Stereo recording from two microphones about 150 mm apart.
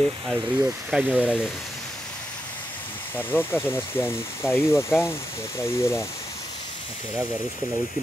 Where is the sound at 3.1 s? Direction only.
15° left (ahead or behind).